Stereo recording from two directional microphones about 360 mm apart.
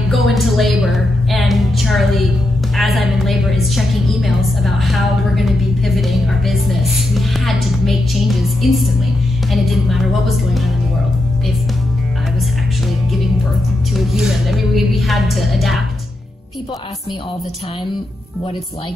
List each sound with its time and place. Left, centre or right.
0.1 s music: centre
2.7 s a woman's voice: centre
13.9 s music: centre